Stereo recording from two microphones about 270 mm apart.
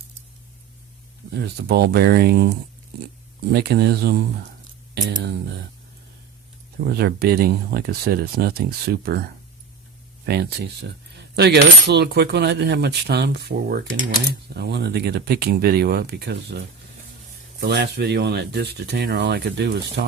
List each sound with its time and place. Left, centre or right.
1.3 s coin: right
6.8 s coin: right